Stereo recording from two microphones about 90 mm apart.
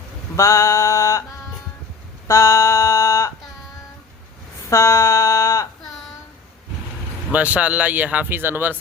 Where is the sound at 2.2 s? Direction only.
35° left (ahead or behind).